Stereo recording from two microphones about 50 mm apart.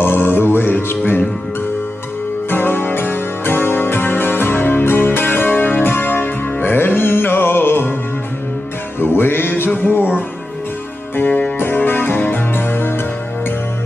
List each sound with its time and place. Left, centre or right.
0.0 s music: left
2.5 s music: left
9.0 s music: left
11.1 s music: left